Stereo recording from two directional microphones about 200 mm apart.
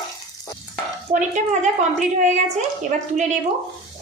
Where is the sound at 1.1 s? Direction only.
35° right (ahead or behind).